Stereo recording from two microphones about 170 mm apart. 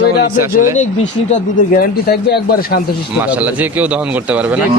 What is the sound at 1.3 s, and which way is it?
Speech, 60° left (ahead or behind).